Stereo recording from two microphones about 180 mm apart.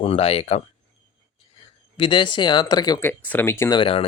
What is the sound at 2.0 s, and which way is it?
Speech, 25° left (ahead or behind).